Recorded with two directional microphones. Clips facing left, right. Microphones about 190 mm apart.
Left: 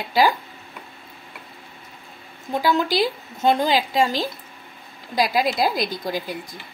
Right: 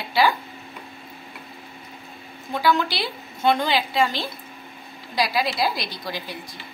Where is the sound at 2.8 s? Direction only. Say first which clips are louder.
Left 6 dB; 40° left (ahead or behind).